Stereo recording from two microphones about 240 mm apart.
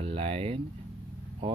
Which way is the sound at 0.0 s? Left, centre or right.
Right.